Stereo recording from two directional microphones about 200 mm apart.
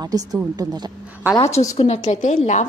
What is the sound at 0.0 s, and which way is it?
Speech, 20° right (ahead or behind).